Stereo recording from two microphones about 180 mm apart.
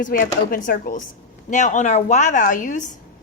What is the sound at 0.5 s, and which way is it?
A woman's voice, 50° left (ahead or behind).